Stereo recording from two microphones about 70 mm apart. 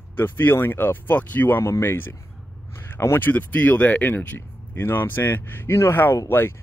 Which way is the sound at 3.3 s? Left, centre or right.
Left.